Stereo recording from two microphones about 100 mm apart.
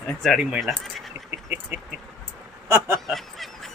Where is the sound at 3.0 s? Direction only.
Centre (ahead or behind).